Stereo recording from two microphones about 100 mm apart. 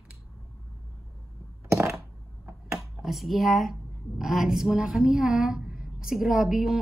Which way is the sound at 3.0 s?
Centre (ahead or behind).